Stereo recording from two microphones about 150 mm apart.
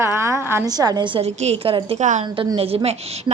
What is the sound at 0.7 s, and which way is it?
A woman's voice, 25° right (ahead or behind).